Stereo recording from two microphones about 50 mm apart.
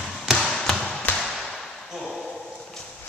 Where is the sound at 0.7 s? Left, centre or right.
Centre.